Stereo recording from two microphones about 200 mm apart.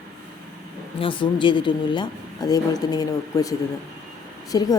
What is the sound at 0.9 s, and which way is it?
Speech, 25° left (ahead or behind).